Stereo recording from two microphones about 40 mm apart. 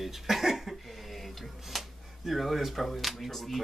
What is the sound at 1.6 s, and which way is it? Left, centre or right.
Speech, centre.